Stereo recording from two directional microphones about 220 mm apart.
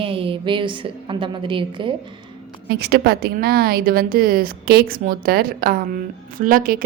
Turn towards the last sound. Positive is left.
turn(degrees=-40)  # may be behind; listen again after turning